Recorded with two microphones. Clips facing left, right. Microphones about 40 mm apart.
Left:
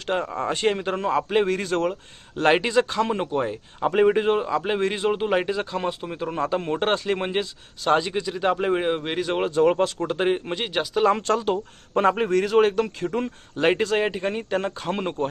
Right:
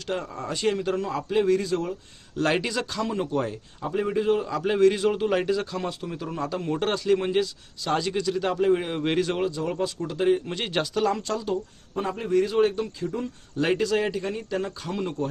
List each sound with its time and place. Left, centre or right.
0.0 s a man's voice: left
3.2 s speech: left
3.8 s a man's voice: left
4.4 s a man's voice: left
9.0 s speech: centre
9.3 s a man's voice: left
10.6 s speech: centre
11.1 s a man's voice: left
11.9 s a man's voice: left